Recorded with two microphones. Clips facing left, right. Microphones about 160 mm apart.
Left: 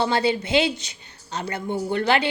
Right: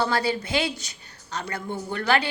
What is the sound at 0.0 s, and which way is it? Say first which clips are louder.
A woman's voice: left 3 dB; 25° left (ahead or behind).